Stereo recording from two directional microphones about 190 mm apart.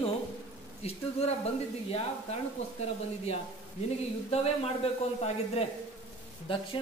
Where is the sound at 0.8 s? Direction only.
35° left (ahead or behind).